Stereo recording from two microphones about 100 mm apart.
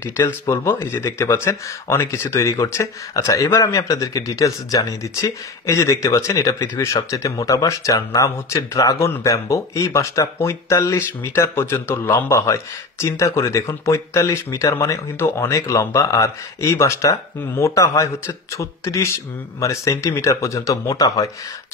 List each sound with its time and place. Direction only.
0.5 s speech: 25° left (ahead or behind)